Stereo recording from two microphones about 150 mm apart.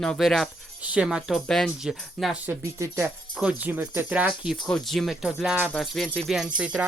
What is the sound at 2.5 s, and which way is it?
Speech, 20° right (ahead or behind).